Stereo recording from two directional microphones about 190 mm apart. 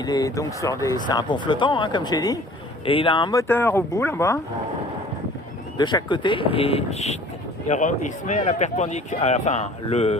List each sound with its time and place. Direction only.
0.0 s speech: 20° left (ahead or behind)
3.4 s speech: 10° left (ahead or behind)
5.7 s speech: 25° left (ahead or behind)